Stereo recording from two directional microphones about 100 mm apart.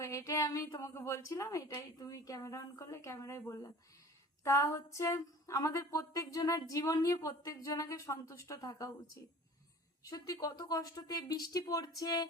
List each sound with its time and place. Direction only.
0.0 s speech: 30° left (ahead or behind)
10.1 s speech: 40° left (ahead or behind)